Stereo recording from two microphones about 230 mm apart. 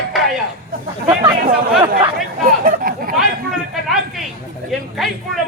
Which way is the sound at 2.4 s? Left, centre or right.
Right.